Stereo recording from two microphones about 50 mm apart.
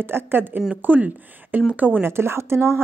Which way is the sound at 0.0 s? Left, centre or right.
Right.